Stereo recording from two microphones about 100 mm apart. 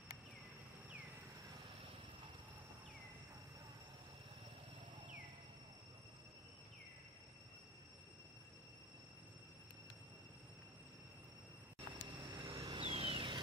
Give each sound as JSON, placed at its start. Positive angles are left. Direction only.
{"t": 0.8, "sound": "vehicle", "side_deg": -15}
{"t": 12.0, "sound": "vehicle", "side_deg": -45}